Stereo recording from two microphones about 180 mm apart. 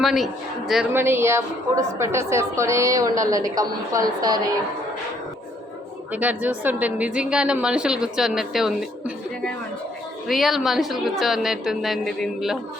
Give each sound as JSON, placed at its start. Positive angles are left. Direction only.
{"t": 0.0, "sound": "a woman's voice", "side_deg": 0}
{"t": 6.1, "sound": "a woman's voice", "side_deg": -10}